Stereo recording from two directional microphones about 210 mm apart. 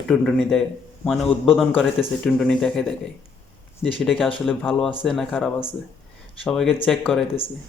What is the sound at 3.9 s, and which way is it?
A man's voice, centre (ahead or behind).